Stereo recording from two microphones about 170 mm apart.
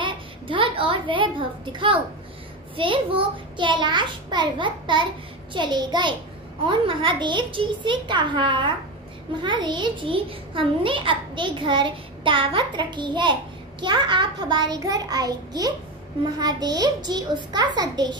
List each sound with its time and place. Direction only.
0.0 s a child's voice: 30° right (ahead or behind)